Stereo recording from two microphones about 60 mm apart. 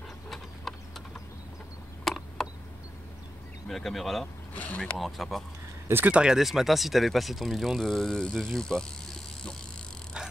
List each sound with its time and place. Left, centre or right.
0.3 s a sound: centre
2.0 s a sound: centre
3.6 s speech: centre
4.6 s speech: left
4.9 s speech: centre
6.0 s speech: centre
6.3 s speech: centre
8.5 s vehicle: centre